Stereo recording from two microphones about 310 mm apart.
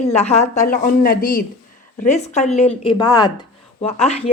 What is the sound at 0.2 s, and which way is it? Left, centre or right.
A woman's voice, left.